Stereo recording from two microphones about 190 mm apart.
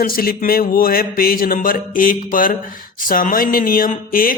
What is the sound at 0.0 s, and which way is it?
Speech, 50° left (ahead or behind).